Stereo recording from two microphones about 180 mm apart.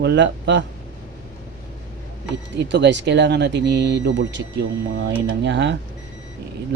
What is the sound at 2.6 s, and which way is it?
Speech, 70° right (ahead or behind).